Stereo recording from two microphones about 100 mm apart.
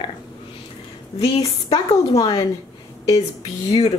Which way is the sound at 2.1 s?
35° left (ahead or behind).